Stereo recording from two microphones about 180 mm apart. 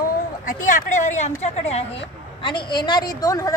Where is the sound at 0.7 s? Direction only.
40° left (ahead or behind); by 3.5 s 20° left (ahead or behind).